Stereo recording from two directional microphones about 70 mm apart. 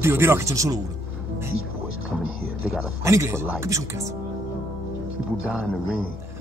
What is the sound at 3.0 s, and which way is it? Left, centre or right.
Speech, right.